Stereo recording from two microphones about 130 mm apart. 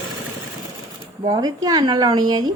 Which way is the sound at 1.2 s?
30° right (ahead or behind).